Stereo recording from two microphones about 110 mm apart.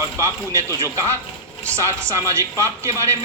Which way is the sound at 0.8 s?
25° right (ahead or behind).